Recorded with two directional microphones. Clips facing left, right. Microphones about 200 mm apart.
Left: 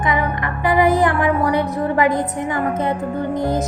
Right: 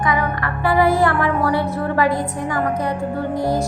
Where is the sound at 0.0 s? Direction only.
20° left (ahead or behind).